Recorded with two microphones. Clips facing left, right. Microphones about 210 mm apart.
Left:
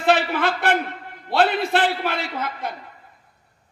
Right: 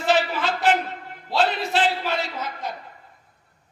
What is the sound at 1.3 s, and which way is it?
A man's voice, 60° left (ahead or behind).